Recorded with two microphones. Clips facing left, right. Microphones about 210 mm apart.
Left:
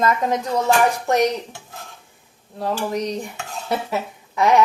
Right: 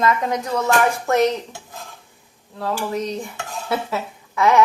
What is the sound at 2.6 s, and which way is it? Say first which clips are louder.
Speech: left 1 dB; 15° left (ahead or behind).